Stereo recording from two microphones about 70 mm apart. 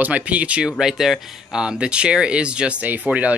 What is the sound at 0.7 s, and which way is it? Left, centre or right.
Speech, centre.